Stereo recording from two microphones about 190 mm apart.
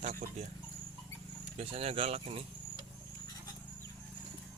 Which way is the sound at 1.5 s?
30° right (ahead or behind).